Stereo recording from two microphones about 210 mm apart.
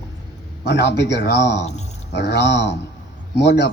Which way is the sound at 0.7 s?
50° left (ahead or behind).